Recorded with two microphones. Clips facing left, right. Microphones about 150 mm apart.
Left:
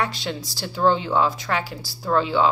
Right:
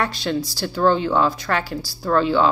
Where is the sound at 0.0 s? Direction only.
20° left (ahead or behind).